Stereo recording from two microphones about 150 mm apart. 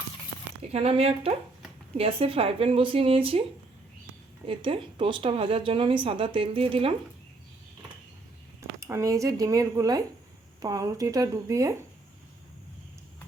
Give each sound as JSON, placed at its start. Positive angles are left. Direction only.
{"t": 0.7, "sound": "a woman's voice", "side_deg": -45}
{"t": 4.4, "sound": "speech", "side_deg": -35}
{"t": 8.8, "sound": "speech", "side_deg": -20}